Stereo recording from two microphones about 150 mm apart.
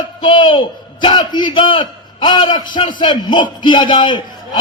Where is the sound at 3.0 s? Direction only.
30° left (ahead or behind).